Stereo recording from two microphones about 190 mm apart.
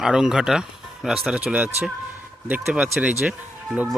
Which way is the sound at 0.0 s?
5° right (ahead or behind).